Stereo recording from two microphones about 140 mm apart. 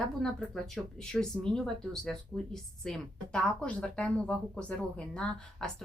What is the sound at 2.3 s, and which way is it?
Speech, 15° right (ahead or behind).